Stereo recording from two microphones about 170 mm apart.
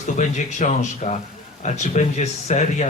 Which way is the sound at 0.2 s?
45° left (ahead or behind).